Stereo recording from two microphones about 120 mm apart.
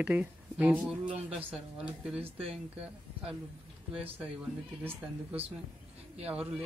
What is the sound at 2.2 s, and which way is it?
Speech, 55° right (ahead or behind).